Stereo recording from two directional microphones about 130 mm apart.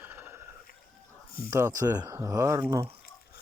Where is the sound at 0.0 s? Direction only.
20° right (ahead or behind).